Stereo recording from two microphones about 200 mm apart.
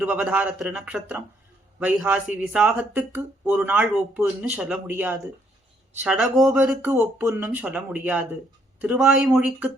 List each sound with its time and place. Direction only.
0.0 s speech: 5° right (ahead or behind)